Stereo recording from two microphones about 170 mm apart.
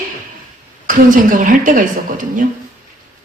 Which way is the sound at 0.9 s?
50° right (ahead or behind).